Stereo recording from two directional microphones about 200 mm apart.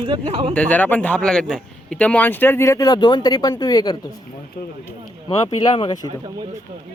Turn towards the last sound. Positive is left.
turn(degrees=20)  # may be behind; listen again after turning